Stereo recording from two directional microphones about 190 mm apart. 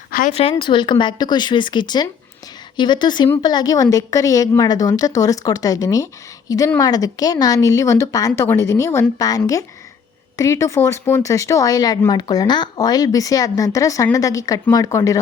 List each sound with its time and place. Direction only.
0.1 s speech: 45° left (ahead or behind)
0.5 s a woman's voice: 25° left (ahead or behind)